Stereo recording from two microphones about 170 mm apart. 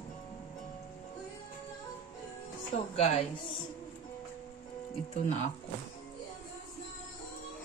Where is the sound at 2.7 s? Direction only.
35° left (ahead or behind).